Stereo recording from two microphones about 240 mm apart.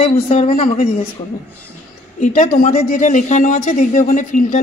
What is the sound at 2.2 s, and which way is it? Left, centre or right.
Speech, left.